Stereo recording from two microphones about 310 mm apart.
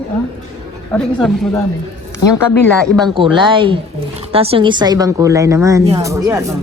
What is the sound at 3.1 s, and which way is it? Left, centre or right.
A woman's voice, centre.